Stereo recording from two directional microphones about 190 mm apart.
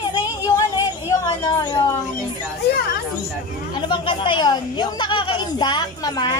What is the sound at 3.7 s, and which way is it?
Speech, 25° left (ahead or behind).